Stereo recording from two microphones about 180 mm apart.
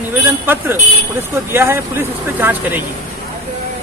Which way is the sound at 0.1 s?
10° right (ahead or behind).